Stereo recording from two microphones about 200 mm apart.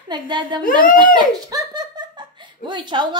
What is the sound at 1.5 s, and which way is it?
Giggle, 20° right (ahead or behind).